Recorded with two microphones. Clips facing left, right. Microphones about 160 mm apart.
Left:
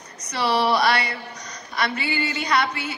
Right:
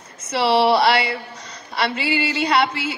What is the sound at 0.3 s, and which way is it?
A woman's voice, 25° right (ahead or behind).